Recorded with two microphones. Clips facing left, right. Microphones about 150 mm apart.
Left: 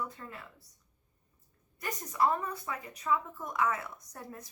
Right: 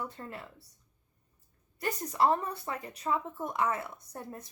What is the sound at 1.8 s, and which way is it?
Speech, 30° right (ahead or behind).